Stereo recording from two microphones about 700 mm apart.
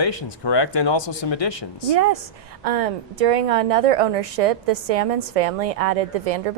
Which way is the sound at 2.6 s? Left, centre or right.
Right.